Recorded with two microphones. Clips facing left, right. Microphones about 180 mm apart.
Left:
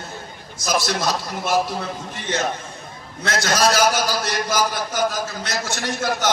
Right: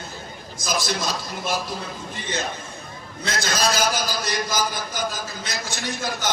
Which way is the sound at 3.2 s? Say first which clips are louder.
Left 5 dB; 65° left (ahead or behind).